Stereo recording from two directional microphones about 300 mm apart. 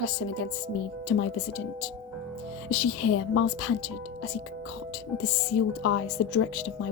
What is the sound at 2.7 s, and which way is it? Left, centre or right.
A woman's voice, left.